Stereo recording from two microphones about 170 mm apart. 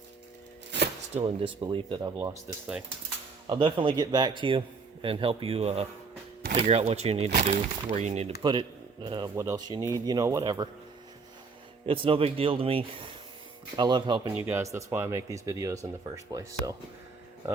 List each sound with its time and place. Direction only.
1.1 s speech: 30° right (ahead or behind)
3.4 s speech: 30° right (ahead or behind)
8.4 s speech: 25° right (ahead or behind)
11.9 s speech: 30° right (ahead or behind)
14.3 s speech: 15° right (ahead or behind)